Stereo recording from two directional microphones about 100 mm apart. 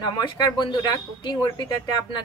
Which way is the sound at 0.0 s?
50° left (ahead or behind).